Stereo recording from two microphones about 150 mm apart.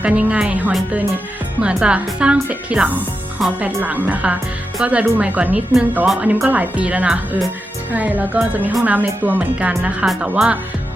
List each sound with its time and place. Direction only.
0.0 s speech: 10° right (ahead or behind)